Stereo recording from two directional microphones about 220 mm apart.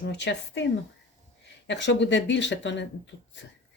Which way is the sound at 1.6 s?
55° left (ahead or behind).